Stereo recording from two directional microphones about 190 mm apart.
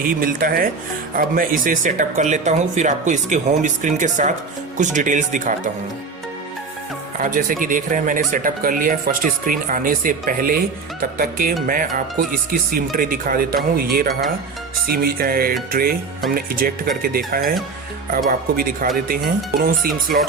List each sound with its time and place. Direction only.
0.2 s speech: 50° right (ahead or behind)
7.2 s speech: 45° right (ahead or behind)